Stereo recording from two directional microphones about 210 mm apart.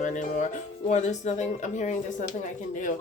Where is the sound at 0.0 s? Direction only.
35° left (ahead or behind).